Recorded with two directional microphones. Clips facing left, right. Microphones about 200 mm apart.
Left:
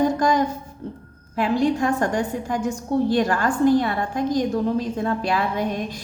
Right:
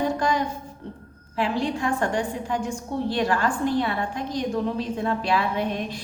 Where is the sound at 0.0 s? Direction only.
45° left (ahead or behind).